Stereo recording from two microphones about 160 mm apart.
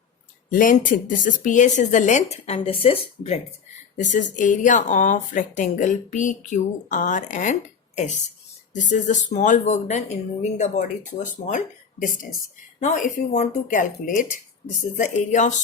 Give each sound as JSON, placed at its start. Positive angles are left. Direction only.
{"t": 0.5, "sound": "speech", "side_deg": 60}
{"t": 3.9, "sound": "speech", "side_deg": 50}